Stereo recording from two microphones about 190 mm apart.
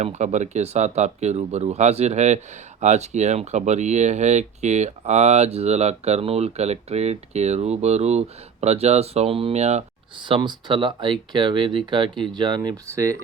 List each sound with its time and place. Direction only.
0.0 s speech: 35° right (ahead or behind); by 13.1 s 15° right (ahead or behind)